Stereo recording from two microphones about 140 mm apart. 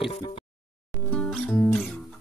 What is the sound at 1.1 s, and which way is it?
Music, 5° left (ahead or behind).